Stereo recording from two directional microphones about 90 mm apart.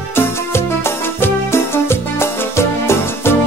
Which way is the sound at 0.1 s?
25° left (ahead or behind).